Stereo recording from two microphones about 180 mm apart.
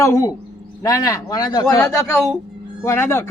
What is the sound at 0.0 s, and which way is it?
Speech, 20° left (ahead or behind).